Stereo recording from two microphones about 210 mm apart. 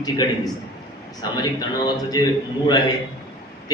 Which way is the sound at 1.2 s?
20° left (ahead or behind).